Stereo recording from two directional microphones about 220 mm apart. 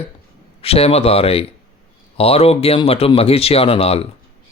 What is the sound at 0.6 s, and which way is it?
Speech, 25° left (ahead or behind).